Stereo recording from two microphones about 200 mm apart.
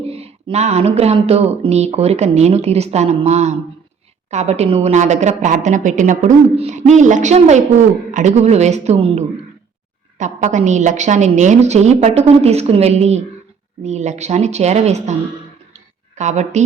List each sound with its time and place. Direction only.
0.0 s speech: 30° right (ahead or behind)
16.1 s speech: 35° right (ahead or behind)